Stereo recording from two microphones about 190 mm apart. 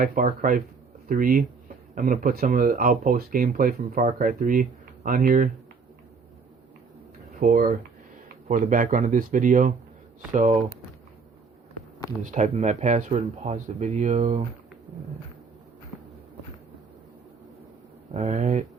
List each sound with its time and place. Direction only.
0.0 s speech: 45° right (ahead or behind)
7.3 s speech: 50° right (ahead or behind)
12.2 s speech: 40° right (ahead or behind)
18.1 s speech: 35° right (ahead or behind)